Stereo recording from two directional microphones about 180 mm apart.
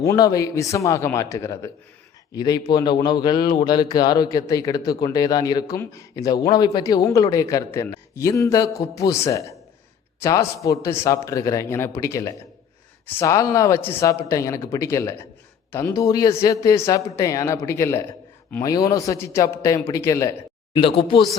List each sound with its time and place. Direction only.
0.0 s speech: 20° left (ahead or behind)
20.7 s speech: 30° left (ahead or behind)